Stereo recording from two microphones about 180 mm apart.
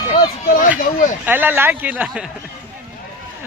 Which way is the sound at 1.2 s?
10° right (ahead or behind).